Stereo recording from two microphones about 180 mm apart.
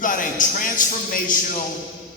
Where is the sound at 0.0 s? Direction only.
45° left (ahead or behind).